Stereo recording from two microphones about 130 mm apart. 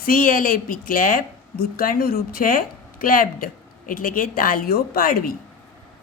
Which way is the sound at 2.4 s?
90° left.